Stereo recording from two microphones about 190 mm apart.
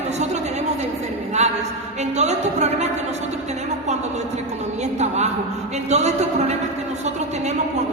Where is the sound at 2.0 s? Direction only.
35° right (ahead or behind).